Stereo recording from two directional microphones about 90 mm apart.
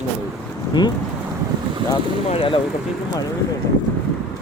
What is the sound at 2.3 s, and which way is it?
Speech, 80° left.